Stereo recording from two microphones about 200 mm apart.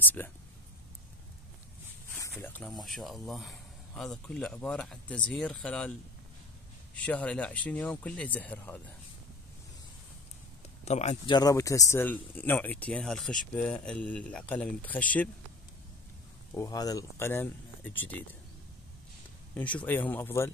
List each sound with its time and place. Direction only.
0.0 s speech: 10° left (ahead or behind)
2.1 s speech: 10° left (ahead or behind)
7.1 s speech: 5° left (ahead or behind)
10.9 s speech: 35° left (ahead or behind)
11.3 s speech: 15° left (ahead or behind)
16.5 s speech: 20° left (ahead or behind)
19.5 s speech: 5° left (ahead or behind)